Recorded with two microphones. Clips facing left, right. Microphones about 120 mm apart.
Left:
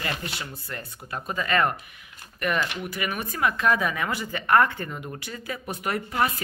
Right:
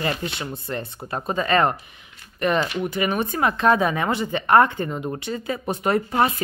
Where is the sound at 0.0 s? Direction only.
25° right (ahead or behind).